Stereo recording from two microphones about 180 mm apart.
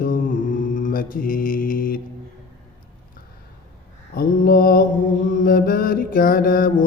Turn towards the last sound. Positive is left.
turn(degrees=50)  # may be behind; listen again after turning